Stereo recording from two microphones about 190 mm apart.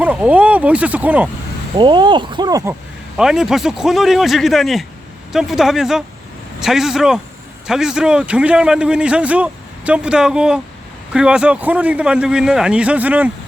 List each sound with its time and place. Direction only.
0.0 s speech: 5° right (ahead or behind)
1.7 s speech: 25° right (ahead or behind)
3.2 s a man's voice: centre (ahead or behind)